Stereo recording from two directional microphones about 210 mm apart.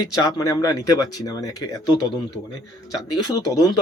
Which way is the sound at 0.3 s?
15° left (ahead or behind).